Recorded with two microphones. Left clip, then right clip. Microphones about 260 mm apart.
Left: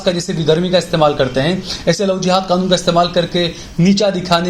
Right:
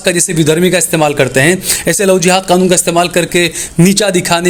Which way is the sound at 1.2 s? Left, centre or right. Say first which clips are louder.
Right 6 dB; right.